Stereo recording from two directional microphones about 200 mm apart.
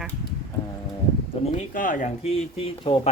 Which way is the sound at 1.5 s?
40° left (ahead or behind).